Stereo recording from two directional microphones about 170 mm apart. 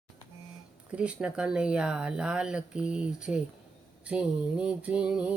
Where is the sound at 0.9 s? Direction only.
5° right (ahead or behind).